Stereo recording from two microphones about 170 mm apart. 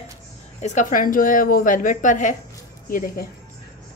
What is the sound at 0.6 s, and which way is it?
A woman's voice, 50° left (ahead or behind).